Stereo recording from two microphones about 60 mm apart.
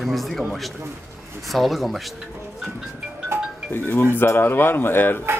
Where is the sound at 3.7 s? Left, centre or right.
Left.